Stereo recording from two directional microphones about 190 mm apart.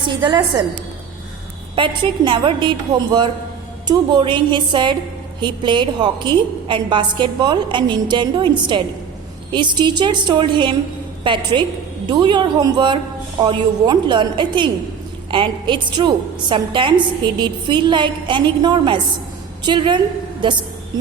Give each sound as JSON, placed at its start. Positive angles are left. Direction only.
{"t": 0.1, "sound": "a woman's voice", "side_deg": -25}
{"t": 2.2, "sound": "a woman's voice", "side_deg": -25}